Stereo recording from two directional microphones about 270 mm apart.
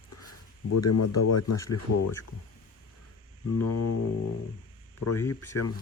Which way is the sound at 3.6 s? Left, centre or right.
Left.